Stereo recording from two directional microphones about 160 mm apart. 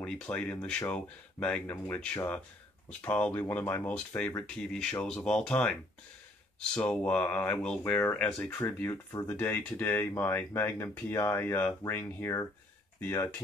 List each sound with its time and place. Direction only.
0.0 s speech: 5° left (ahead or behind)